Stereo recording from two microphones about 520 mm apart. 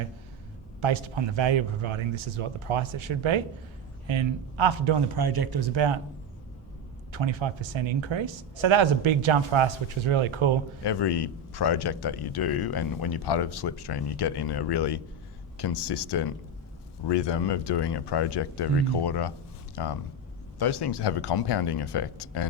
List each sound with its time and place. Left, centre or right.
0.8 s speech: right
7.1 s speech: right
10.8 s a man's voice: left